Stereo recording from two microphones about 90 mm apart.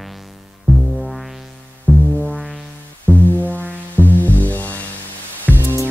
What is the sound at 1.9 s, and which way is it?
Music, 20° left (ahead or behind).